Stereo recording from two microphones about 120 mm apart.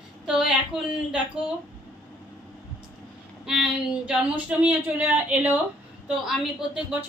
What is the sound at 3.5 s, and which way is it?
A woman's voice, 5° right (ahead or behind).